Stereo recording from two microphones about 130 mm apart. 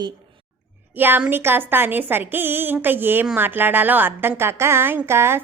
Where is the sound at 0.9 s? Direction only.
15° right (ahead or behind).